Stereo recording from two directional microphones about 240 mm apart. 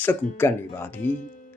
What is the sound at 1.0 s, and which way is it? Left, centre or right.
Speech, left.